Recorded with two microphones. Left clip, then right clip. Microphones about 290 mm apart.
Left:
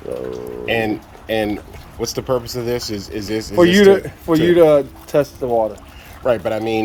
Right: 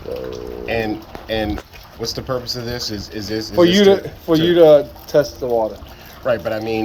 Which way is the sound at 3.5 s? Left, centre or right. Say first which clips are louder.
Left 1 dB; left.